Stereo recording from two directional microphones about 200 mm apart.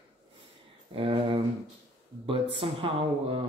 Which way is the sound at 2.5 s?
25° right (ahead or behind).